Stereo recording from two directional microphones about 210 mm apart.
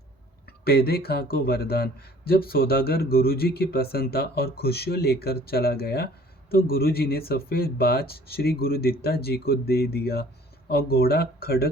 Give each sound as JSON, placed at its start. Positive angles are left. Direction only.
{"t": 0.6, "sound": "a man's voice", "side_deg": 50}